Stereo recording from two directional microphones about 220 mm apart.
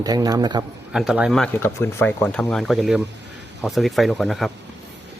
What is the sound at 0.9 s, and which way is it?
Speech, 5° right (ahead or behind).